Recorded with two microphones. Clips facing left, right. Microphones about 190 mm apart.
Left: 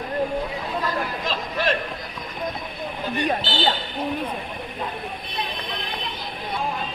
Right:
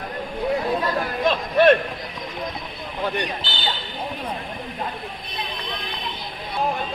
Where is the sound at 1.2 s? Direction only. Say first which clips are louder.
Right 9 dB; 55° right (ahead or behind).